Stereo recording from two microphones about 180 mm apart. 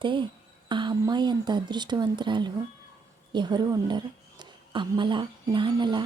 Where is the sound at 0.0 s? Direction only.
25° right (ahead or behind).